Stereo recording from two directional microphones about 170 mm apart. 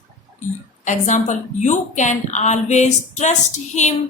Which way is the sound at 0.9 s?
45° left (ahead or behind).